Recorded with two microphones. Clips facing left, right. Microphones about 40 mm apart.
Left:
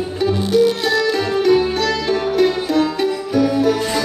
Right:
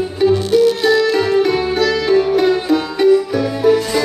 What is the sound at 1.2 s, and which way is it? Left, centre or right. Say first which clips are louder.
Music: even; centre.